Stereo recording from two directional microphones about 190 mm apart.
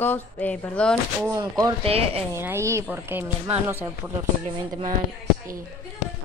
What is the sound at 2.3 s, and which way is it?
Speech, 15° right (ahead or behind).